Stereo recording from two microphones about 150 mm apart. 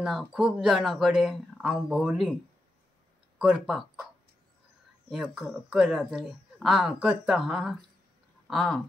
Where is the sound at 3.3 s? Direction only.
5° right (ahead or behind).